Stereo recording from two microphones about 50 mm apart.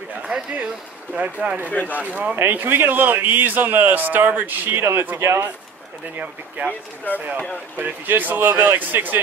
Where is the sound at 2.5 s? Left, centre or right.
Right.